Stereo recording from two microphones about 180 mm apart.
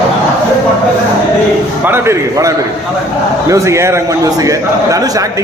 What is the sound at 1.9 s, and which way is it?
A man's voice, 15° right (ahead or behind).